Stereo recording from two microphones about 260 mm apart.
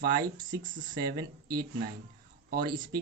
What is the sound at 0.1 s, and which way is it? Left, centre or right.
Speech, centre.